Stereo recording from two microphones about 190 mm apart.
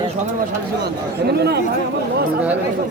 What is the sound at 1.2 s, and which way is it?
Speech, 60° right (ahead or behind).